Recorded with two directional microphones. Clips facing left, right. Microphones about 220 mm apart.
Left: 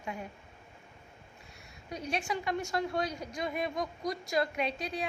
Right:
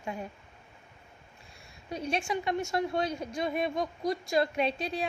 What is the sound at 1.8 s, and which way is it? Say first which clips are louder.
A woman's voice: right 3 dB; 25° right (ahead or behind).